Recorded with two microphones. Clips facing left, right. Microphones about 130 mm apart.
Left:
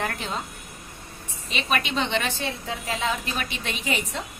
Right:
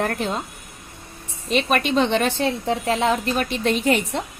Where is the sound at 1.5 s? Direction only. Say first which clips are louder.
Right 7 dB; 50° right (ahead or behind).